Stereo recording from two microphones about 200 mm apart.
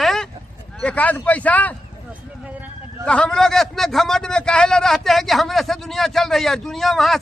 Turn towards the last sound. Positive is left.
turn(degrees=0)  # may be behind; listen again after turning